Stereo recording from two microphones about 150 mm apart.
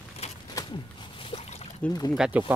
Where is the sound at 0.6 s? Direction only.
35° left (ahead or behind).